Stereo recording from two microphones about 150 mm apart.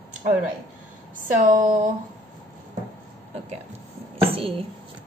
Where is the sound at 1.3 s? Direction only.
60° right (ahead or behind).